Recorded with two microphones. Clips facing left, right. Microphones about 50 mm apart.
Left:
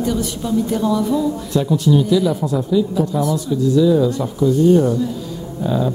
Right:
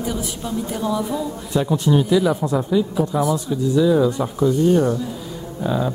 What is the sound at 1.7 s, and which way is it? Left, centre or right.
A woman's voice, right.